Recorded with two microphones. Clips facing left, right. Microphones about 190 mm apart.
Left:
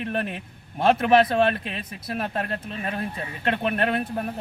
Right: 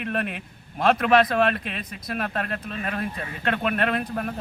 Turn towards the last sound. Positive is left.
turn(degrees=25)  # may be behind; listen again after turning